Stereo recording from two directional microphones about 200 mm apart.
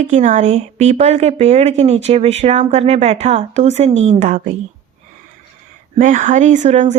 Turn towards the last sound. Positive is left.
turn(degrees=-35)  # may be behind; listen again after turning